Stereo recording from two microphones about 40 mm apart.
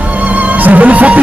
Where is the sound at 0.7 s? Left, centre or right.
Right.